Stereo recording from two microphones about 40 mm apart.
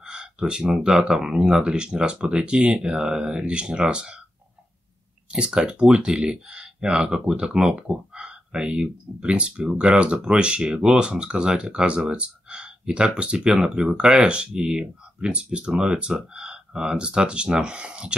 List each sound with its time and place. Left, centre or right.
0.0 s a sound: right
0.7 s speech: centre
5.3 s speech: right